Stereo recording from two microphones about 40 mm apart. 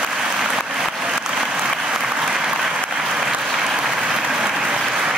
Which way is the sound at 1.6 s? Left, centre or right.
Centre.